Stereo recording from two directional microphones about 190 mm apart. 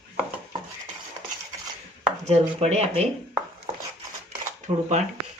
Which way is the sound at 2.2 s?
35° right (ahead or behind).